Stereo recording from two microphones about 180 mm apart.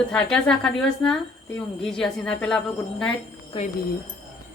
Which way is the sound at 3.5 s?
30° left (ahead or behind).